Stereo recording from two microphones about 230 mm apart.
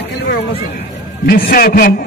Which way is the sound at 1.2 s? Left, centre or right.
Left.